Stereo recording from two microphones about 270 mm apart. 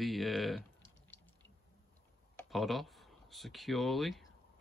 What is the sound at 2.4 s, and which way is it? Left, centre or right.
Speech, centre.